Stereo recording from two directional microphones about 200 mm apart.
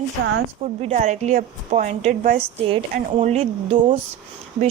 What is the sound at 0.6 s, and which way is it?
Speech, 30° right (ahead or behind).